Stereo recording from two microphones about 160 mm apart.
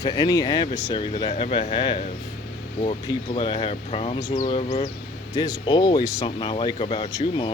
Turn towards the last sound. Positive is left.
turn(degrees=30)  # may be behind; listen again after turning